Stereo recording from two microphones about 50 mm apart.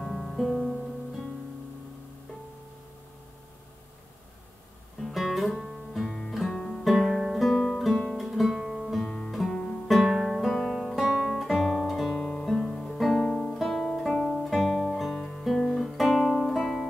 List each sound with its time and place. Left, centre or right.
0.0 s music: centre
5.0 s music: centre
6.5 s music: centre
6.8 s music: centre
8.3 s guitar: centre
9.0 s guitar: centre
9.3 s guitar: centre
9.8 s music: centre
11.0 s guitar: centre
15.1 s guitar: centre
16.0 s music: centre